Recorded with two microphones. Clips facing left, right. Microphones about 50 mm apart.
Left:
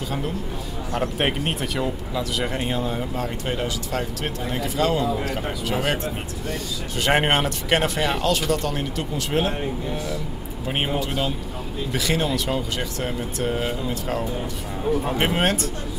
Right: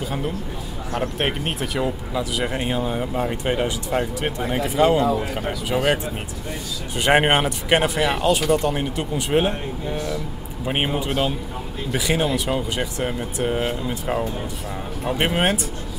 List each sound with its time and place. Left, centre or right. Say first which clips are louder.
0.9 s speech: even; centre; by 5.1 s right
5.7 s speech: right 4 dB; centre
7.0 s speech: right 3 dB; centre
11.1 s speech: right 3 dB; centre